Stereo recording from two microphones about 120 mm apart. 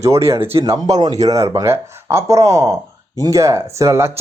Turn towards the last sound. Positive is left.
turn(degrees=-25)  # may be behind; listen again after turning